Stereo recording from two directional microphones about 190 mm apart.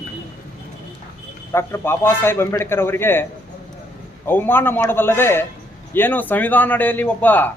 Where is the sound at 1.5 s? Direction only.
15° left (ahead or behind).